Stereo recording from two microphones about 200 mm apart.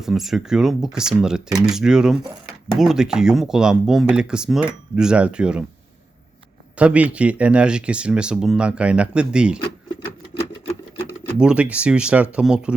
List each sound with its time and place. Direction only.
0.0 s speech: centre (ahead or behind)
6.7 s speech: 5° right (ahead or behind)
11.3 s speech: 5° right (ahead or behind)